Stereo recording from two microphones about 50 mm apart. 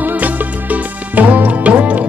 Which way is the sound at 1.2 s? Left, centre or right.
Right.